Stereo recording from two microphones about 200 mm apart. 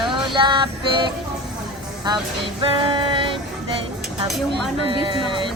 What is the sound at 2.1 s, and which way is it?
Music, 20° right (ahead or behind).